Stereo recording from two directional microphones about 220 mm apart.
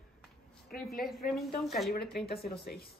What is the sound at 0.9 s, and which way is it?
Speech, centre (ahead or behind).